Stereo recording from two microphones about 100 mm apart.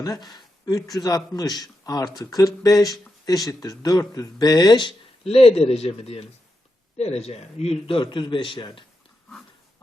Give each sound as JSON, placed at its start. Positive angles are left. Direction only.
{"t": 0.0, "sound": "speech", "side_deg": 40}
{"t": 4.9, "sound": "a man's voice", "side_deg": 75}